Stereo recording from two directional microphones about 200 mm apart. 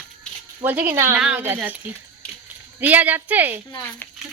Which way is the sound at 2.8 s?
10° right (ahead or behind).